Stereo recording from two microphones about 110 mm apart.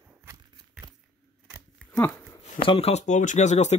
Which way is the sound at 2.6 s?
60° left (ahead or behind).